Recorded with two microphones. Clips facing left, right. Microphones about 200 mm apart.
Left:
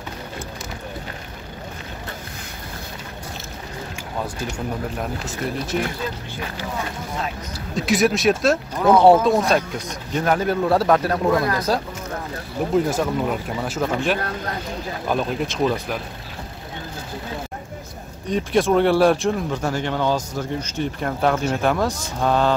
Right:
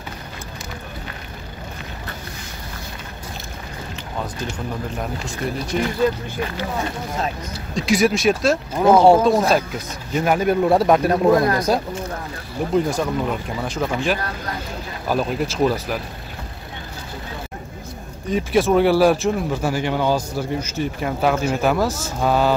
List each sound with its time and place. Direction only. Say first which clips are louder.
4.9 s speech: even; centre (ahead or behind)
7.7 s speech: right 1 dB; centre (ahead or behind)
8.7 s speech: right 3 dB; 25° right (ahead or behind)
9.0 s speech: right 1 dB; centre (ahead or behind)
12.7 s speech: even; 5° left (ahead or behind)
18.3 s speech: right 1 dB; 5° right (ahead or behind)